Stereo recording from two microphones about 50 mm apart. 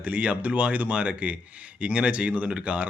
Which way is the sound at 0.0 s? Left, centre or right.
Right.